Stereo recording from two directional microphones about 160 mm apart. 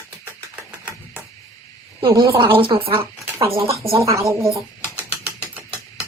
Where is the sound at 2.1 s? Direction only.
30° right (ahead or behind).